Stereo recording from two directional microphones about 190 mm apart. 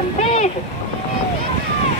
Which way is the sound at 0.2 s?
35° left (ahead or behind).